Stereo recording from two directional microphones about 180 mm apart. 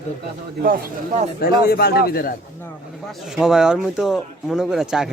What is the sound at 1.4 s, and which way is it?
Speech, 60° left (ahead or behind).